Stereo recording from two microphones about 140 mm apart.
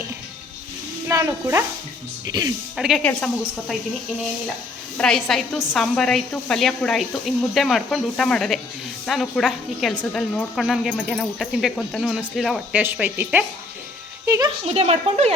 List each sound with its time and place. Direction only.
1.0 s speech: 20° right (ahead or behind)
2.7 s a woman's voice: 5° right (ahead or behind)
3.0 s a woman's voice: 10° left (ahead or behind)
4.9 s a woman's voice: 5° left (ahead or behind)
12.7 s speech: 15° right (ahead or behind)
14.3 s speech: 25° right (ahead or behind)
14.6 s speech: 45° right (ahead or behind)